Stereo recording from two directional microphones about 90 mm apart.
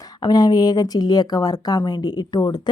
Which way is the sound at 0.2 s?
50° left (ahead or behind).